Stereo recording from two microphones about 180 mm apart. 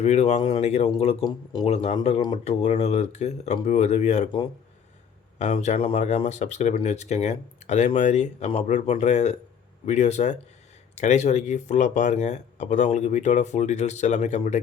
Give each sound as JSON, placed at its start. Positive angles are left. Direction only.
{"t": 0.0, "sound": "speech", "side_deg": 35}